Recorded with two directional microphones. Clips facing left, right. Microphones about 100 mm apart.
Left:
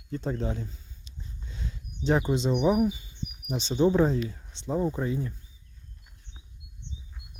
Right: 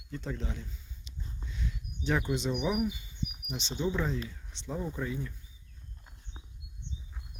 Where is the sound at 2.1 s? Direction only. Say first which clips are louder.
Left 6 dB; 30° left (ahead or behind).